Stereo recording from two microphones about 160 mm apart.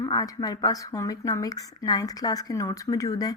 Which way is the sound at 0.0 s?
25° left (ahead or behind).